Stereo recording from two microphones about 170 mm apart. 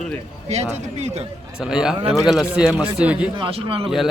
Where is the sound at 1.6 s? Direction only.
5° right (ahead or behind).